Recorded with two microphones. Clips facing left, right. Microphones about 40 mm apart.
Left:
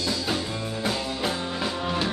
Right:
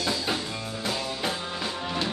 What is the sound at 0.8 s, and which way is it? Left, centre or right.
Music, centre.